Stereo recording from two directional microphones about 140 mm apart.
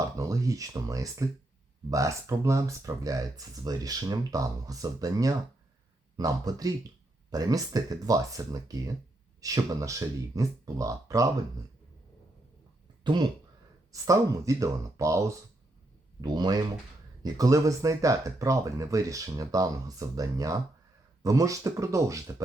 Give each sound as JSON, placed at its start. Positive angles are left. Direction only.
{"t": 0.0, "sound": "speech", "side_deg": -25}
{"t": 13.9, "sound": "speech", "side_deg": -25}